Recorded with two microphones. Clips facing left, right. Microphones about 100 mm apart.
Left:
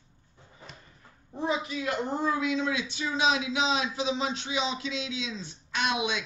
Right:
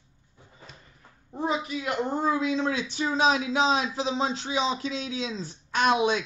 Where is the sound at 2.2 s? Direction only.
35° right (ahead or behind).